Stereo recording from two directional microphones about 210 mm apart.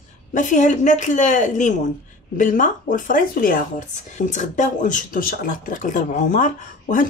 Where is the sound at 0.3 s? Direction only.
35° left (ahead or behind).